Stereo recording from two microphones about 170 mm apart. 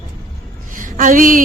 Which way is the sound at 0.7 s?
50° right (ahead or behind).